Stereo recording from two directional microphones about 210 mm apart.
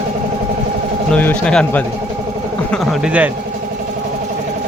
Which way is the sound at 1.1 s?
5° left (ahead or behind).